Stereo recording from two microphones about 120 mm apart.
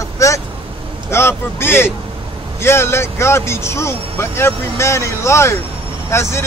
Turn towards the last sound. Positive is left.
turn(degrees=20)  # may be behind; listen again after turning